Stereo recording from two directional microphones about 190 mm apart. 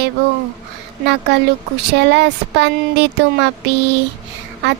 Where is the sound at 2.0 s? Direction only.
65° right (ahead or behind).